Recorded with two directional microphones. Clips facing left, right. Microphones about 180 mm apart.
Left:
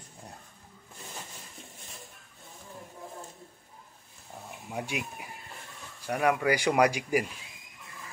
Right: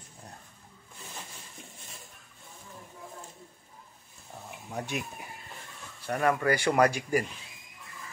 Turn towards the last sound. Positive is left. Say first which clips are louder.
# even
turn(degrees=10)  # may be behind; listen again after turning